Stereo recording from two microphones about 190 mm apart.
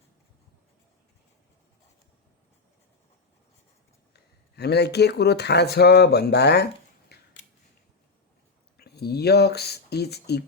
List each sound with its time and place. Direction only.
4.1 s speech: 60° left (ahead or behind)
7.1 s scissors: 55° left (ahead or behind)
8.8 s speech: 55° left (ahead or behind)